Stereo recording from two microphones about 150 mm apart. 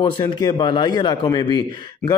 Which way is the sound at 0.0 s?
25° left (ahead or behind).